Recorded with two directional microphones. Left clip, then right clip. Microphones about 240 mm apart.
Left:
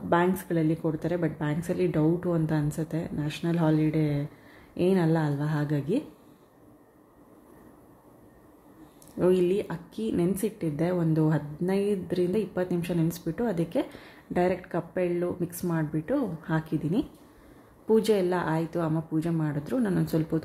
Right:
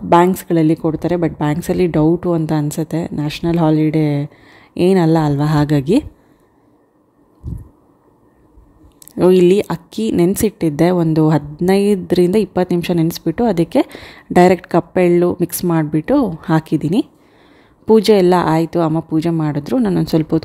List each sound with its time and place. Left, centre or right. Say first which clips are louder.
0.1 s speech: right 13 dB; right
9.2 s speech: right 13 dB; right